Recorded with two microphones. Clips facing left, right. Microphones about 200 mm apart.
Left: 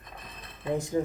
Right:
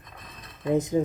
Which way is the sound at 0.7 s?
20° right (ahead or behind).